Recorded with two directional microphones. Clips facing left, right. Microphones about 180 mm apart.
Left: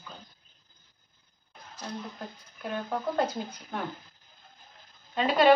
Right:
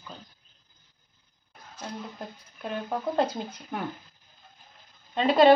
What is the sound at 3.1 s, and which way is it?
Speech, 25° right (ahead or behind).